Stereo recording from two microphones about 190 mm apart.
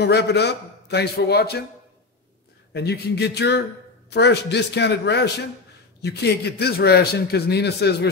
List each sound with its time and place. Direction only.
0.0 s a man's voice: 60° left (ahead or behind)
2.7 s a man's voice: 60° left (ahead or behind)